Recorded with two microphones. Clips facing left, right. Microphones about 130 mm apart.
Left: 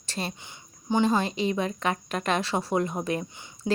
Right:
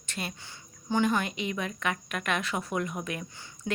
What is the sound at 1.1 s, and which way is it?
Speech, 30° left (ahead or behind).